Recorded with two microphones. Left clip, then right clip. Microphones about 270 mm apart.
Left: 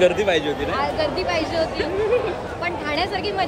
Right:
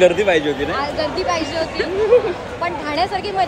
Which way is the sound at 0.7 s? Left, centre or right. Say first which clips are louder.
Right 1 dB; centre.